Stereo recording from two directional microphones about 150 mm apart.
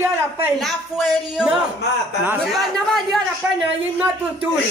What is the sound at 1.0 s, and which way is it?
Speech, 5° right (ahead or behind).